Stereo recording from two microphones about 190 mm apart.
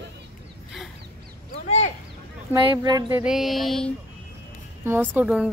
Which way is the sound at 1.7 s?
35° left (ahead or behind).